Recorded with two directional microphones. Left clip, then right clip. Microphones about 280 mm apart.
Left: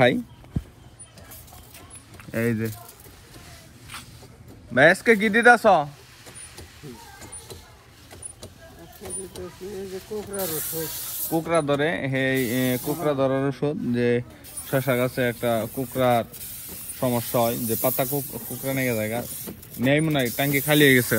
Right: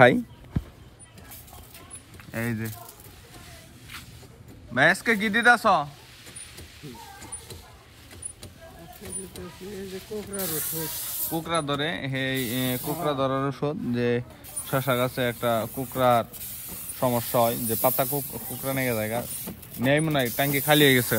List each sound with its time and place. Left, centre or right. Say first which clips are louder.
2.3 s speech: left 6 dB; centre
5.0 s speech: left 4 dB; centre
9.0 s speech: left 5 dB; centre